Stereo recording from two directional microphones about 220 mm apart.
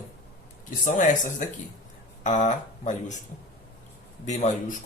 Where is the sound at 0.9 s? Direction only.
35° left (ahead or behind).